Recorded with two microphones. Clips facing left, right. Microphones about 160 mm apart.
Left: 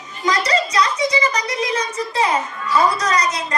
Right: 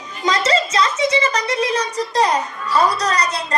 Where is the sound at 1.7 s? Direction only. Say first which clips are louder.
Right 2 dB; 35° right (ahead or behind).